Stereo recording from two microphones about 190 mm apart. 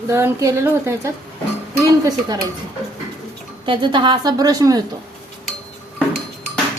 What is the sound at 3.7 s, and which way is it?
A woman's voice, 25° right (ahead or behind).